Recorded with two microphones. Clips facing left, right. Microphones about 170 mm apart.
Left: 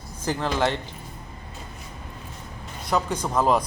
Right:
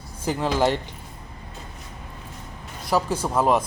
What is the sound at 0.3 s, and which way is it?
Speech, 10° right (ahead or behind).